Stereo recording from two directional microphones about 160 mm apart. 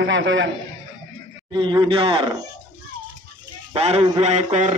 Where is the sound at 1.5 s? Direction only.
30° right (ahead or behind).